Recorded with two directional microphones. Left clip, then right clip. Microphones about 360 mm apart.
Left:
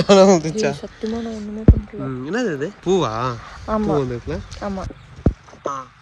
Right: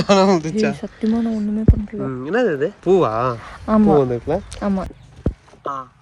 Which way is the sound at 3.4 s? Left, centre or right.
Right.